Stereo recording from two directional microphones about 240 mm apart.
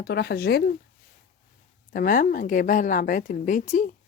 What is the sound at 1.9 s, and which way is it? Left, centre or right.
A woman's voice, left.